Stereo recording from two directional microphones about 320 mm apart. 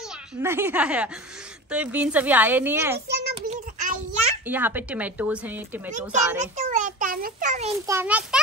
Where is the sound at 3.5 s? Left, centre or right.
Right.